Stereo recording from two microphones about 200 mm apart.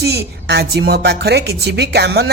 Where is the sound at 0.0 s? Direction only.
55° right (ahead or behind).